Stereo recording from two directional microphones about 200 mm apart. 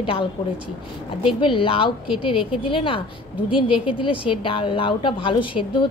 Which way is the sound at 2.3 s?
5° right (ahead or behind).